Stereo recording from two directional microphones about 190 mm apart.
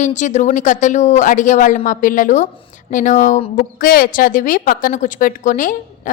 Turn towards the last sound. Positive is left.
turn(degrees=45)  # may be behind; listen again after turning